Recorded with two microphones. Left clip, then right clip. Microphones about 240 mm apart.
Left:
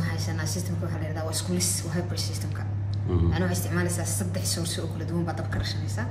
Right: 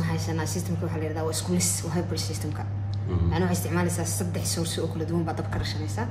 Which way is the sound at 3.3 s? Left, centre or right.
Right.